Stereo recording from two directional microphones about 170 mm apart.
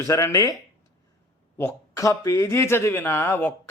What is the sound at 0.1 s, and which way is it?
Speech, 20° left (ahead or behind).